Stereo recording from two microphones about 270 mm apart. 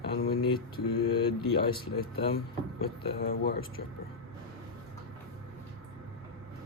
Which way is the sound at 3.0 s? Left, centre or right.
Left.